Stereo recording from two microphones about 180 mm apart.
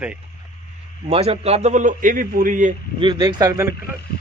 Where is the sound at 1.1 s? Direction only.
35° right (ahead or behind).